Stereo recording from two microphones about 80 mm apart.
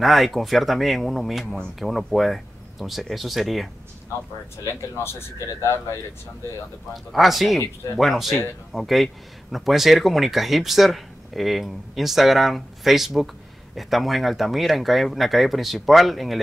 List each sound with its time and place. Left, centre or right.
0.0 s speech: centre
4.6 s speech: left
6.9 s speech: centre